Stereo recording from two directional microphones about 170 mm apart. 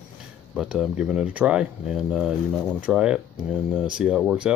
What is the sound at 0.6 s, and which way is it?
Speech, 5° right (ahead or behind).